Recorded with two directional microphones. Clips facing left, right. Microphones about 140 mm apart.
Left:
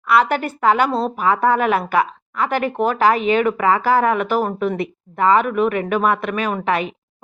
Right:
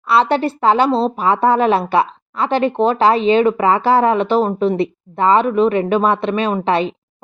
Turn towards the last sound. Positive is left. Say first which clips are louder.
# right 4 dB
turn(degrees=-30)  # may be behind; listen again after turning